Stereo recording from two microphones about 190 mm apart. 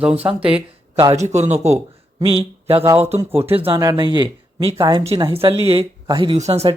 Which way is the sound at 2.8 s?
15° right (ahead or behind).